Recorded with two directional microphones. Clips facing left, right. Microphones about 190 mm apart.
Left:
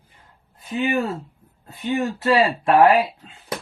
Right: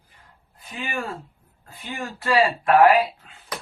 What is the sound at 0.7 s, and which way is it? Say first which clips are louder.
Speech: left 9 dB; 25° left (ahead or behind).